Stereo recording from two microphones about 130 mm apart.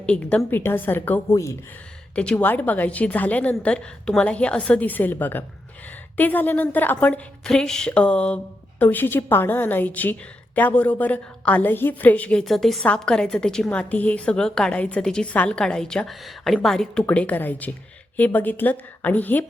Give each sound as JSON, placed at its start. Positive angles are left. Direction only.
{"t": 0.0, "sound": "a woman's voice", "side_deg": 10}
{"t": 2.1, "sound": "a woman's voice", "side_deg": 10}